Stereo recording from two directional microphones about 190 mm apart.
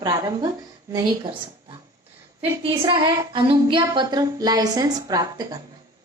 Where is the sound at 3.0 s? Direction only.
25° right (ahead or behind).